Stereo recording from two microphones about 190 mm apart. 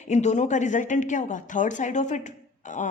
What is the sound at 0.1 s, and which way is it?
A woman's voice, 35° left (ahead or behind).